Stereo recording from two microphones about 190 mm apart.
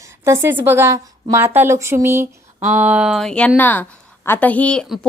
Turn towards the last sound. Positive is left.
turn(degrees=5)  # may be behind; listen again after turning